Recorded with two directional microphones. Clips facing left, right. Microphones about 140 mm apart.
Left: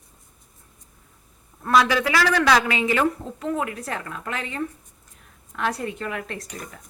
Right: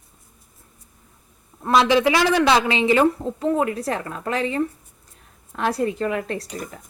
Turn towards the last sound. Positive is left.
turn(degrees=-35)  # may be behind; listen again after turning